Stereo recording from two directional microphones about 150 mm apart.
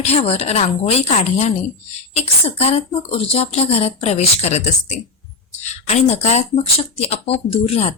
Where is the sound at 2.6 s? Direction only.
40° left (ahead or behind).